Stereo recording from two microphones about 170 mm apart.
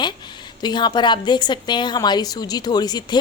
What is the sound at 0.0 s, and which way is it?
A woman's voice, 25° left (ahead or behind).